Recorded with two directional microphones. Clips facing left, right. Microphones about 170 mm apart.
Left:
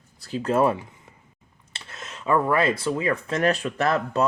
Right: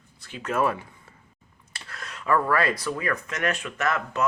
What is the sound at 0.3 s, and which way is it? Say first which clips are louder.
Speech: left 4 dB; 35° left (ahead or behind).